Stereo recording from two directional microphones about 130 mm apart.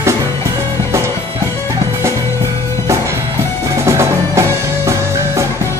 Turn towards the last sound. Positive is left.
turn(degrees=-20)  # may be behind; listen again after turning